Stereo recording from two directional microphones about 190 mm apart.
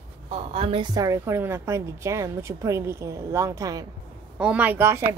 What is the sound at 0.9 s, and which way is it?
A woman's voice, 15° right (ahead or behind).